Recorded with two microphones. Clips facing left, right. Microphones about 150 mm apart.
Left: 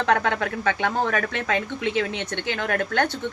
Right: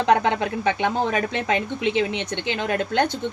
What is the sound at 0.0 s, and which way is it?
A woman's voice, 20° right (ahead or behind).